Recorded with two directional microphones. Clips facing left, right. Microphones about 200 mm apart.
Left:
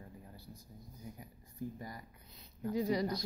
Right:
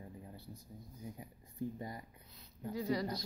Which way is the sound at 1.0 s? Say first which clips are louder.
Right 2 dB; 25° right (ahead or behind).